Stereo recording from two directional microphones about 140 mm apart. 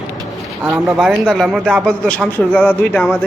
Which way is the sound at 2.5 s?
10° left (ahead or behind).